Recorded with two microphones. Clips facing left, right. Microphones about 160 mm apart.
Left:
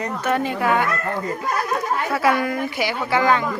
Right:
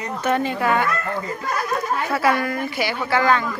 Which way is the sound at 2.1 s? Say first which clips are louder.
Left 1 dB; 10° left (ahead or behind).